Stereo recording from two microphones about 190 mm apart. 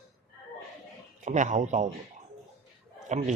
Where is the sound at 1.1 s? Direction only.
40° right (ahead or behind).